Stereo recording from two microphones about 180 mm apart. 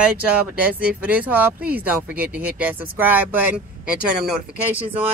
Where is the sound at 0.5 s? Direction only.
5° right (ahead or behind).